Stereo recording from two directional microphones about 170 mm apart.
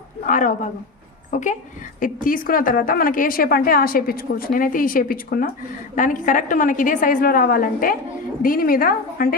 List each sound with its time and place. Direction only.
0.3 s a woman's voice: 50° left (ahead or behind)